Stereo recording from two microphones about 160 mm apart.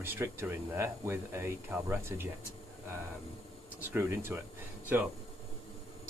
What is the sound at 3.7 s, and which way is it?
Speech, 15° right (ahead or behind).